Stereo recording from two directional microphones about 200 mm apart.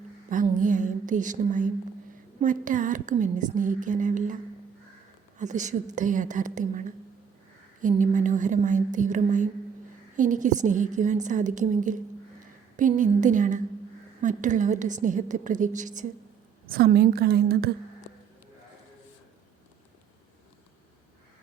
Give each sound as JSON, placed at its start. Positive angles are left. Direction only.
{"t": 0.3, "sound": "a woman's voice", "side_deg": -40}
{"t": 5.4, "sound": "a woman's voice", "side_deg": -35}